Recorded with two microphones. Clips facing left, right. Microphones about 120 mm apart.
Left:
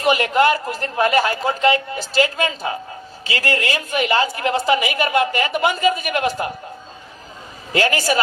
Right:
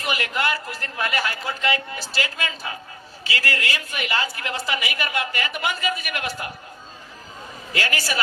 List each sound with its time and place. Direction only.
0.0 s a woman's voice: 30° left (ahead or behind)
7.7 s a woman's voice: 30° left (ahead or behind)